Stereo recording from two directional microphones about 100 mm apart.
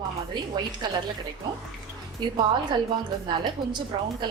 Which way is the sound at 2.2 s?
50° right (ahead or behind).